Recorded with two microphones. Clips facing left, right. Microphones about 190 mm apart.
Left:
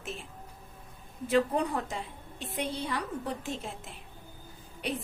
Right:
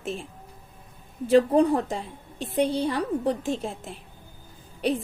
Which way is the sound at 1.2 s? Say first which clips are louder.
Right 8 dB; 30° right (ahead or behind).